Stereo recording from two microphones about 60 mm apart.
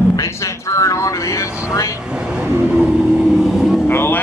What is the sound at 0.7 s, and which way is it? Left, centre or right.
Vehicle, left.